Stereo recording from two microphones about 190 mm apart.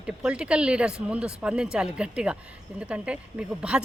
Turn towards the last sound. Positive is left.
turn(degrees=-5)  # may be behind; listen again after turning